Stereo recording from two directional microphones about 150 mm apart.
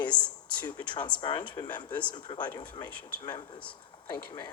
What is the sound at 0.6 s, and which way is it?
Speech, 30° left (ahead or behind).